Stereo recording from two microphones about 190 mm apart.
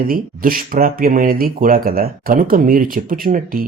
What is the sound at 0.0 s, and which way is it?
Speech, 50° right (ahead or behind).